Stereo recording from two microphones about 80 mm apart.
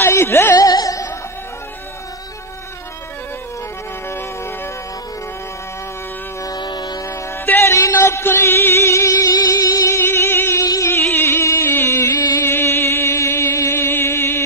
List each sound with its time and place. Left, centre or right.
0.0 s music: left
0.6 s music: left
6.4 s music: left
7.4 s music: left
7.7 s music: left
10.6 s music: left
10.9 s music: left